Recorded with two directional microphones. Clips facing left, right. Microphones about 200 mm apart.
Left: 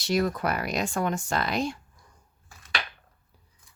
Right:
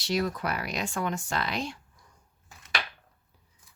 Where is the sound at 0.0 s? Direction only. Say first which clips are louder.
Left 3 dB; 50° left (ahead or behind).